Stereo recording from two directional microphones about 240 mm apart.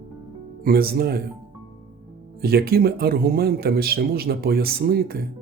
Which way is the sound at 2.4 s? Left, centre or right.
Right.